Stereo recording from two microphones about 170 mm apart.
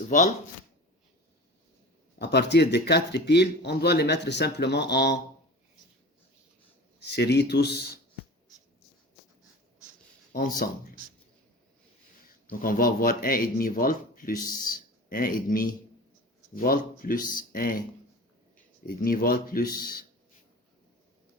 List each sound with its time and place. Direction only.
0.1 s speech: 45° left (ahead or behind)
2.1 s speech: 80° left
7.2 s speech: 75° left (ahead or behind)
10.3 s speech: 55° left (ahead or behind)
12.5 s speech: 55° left (ahead or behind)
18.9 s speech: 60° left (ahead or behind)